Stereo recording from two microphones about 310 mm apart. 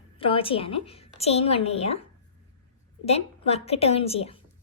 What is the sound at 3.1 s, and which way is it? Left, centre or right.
A woman's voice, centre.